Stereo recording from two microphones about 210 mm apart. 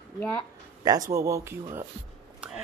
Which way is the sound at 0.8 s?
15° right (ahead or behind).